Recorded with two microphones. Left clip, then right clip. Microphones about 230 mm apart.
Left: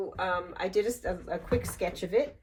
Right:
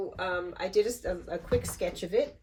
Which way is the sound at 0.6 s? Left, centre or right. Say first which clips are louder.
Right 2 dB; left.